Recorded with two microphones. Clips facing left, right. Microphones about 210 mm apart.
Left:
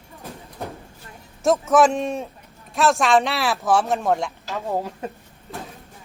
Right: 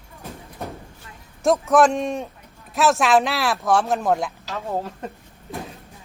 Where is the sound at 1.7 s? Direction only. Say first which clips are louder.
Even; centre (ahead or behind).